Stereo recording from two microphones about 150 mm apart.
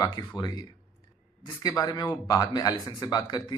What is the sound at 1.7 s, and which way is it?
Speech, 25° left (ahead or behind).